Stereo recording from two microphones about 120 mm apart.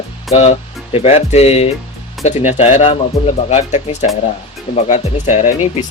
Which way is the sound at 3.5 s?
70° left (ahead or behind).